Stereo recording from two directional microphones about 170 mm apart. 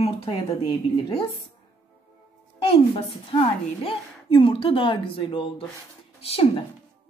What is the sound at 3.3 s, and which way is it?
Speech, 35° left (ahead or behind).